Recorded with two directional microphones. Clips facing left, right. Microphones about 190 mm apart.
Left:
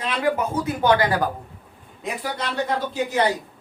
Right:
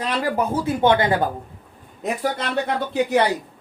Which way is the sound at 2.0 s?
50° right (ahead or behind).